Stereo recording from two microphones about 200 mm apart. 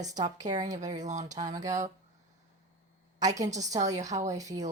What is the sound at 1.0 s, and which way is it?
Speech, 35° right (ahead or behind).